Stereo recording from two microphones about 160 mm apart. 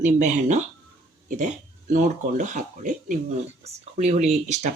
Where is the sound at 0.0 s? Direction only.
45° right (ahead or behind).